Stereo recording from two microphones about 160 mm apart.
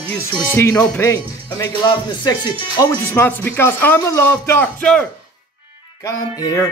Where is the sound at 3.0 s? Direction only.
15° left (ahead or behind).